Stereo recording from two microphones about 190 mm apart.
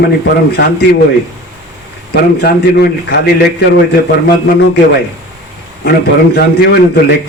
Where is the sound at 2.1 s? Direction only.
55° left (ahead or behind).